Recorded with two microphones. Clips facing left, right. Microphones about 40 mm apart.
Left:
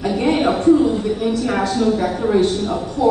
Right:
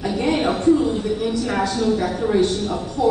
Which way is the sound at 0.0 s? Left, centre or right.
Centre.